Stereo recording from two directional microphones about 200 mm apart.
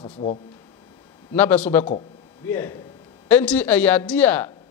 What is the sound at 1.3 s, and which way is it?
Speech, 10° left (ahead or behind).